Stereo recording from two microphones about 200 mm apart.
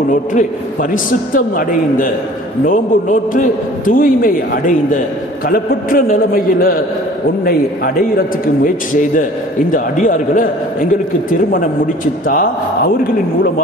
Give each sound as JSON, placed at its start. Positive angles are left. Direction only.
{"t": 0.1, "sound": "a man's voice", "side_deg": 40}
{"t": 2.6, "sound": "a man's voice", "side_deg": 40}
{"t": 9.7, "sound": "a man's voice", "side_deg": 40}